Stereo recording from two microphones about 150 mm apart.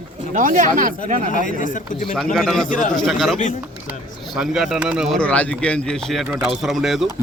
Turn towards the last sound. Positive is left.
turn(degrees=0)  # may be behind; listen again after turning